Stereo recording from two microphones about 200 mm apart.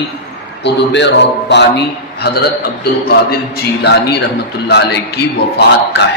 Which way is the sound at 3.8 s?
55° left (ahead or behind).